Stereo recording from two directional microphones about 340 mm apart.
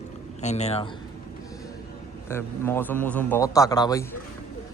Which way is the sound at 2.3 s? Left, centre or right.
Centre.